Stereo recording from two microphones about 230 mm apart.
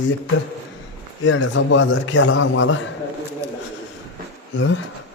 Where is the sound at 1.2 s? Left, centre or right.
Left.